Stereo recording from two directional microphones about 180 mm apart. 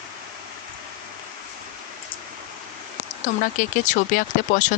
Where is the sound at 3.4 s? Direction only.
45° left (ahead or behind).